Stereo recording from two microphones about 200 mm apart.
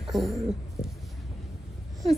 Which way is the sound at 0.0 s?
Centre (ahead or behind).